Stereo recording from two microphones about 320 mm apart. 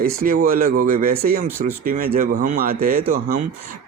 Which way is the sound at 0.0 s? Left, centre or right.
Right.